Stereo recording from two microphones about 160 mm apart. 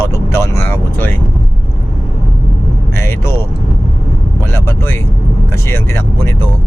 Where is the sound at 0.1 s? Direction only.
15° left (ahead or behind).